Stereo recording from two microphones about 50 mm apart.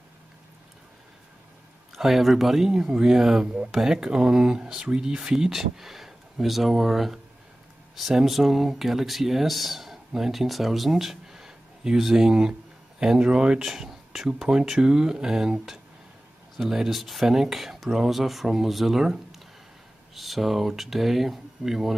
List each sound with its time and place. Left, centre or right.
2.0 s speech: centre
20.2 s speech: centre